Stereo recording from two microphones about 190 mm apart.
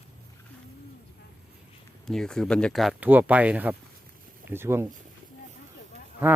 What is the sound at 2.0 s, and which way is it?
Speech, 5° left (ahead or behind).